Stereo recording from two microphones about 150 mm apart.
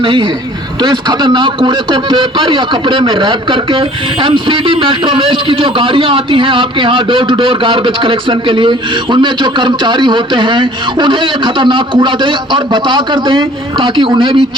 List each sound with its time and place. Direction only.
0.0 s a man's voice: 35° right (ahead or behind)